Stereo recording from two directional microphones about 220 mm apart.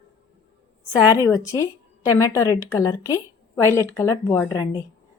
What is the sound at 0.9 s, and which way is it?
A woman's voice, 15° left (ahead or behind).